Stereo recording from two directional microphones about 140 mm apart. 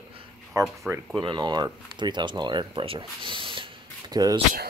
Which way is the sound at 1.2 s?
35° right (ahead or behind).